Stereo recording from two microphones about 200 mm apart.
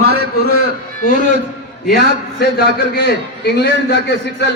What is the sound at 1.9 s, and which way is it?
A man's voice, 50° left (ahead or behind).